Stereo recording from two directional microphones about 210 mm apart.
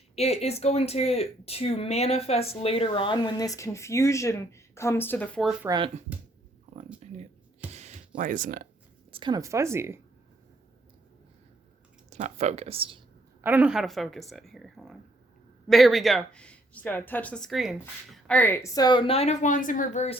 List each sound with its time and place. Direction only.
0.2 s speech: 30° left (ahead or behind); by 5.5 s centre (ahead or behind)
5.6 s speech: 20° right (ahead or behind)
6.1 s a sound: 5° right (ahead or behind)
6.7 s a sound: 30° right (ahead or behind)
7.7 s music: 30° right (ahead or behind)
9.1 s speech: 20° right (ahead or behind)
12.1 s speech: 35° right (ahead or behind)
13.4 s speech: 5° right (ahead or behind); by 20.1 s 35° left (ahead or behind)